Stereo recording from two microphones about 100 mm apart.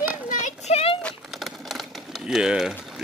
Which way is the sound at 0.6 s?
85° left.